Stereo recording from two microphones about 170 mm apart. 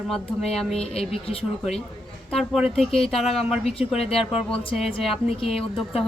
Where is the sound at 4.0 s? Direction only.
35° left (ahead or behind).